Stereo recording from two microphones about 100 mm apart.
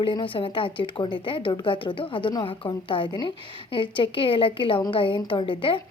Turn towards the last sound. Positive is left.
turn(degrees=60)  # may be behind; listen again after turning